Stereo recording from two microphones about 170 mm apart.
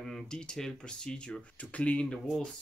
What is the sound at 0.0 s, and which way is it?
Speech, 5° left (ahead or behind).